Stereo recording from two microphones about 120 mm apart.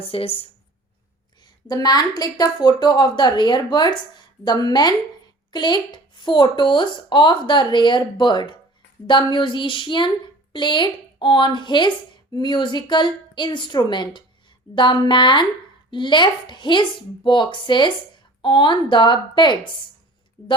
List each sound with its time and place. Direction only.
0.0 s speech: 50° left (ahead or behind)
1.6 s speech: 35° left (ahead or behind)